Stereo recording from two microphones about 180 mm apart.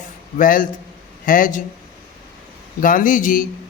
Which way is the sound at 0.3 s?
50° left (ahead or behind).